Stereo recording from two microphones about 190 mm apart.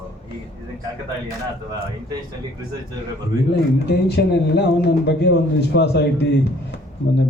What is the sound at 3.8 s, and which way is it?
A man's voice, 60° left (ahead or behind).